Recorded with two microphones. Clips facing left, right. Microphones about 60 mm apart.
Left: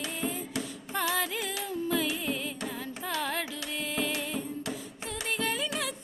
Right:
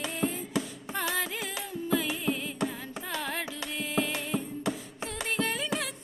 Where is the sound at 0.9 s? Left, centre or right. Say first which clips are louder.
Left 1 dB; right.